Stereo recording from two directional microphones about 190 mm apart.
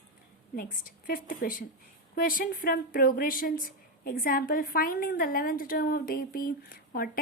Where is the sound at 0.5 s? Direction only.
50° left (ahead or behind).